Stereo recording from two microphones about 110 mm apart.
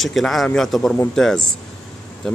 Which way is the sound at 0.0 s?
Centre (ahead or behind).